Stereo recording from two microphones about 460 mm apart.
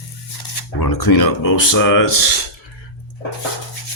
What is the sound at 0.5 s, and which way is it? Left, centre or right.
Speech, left.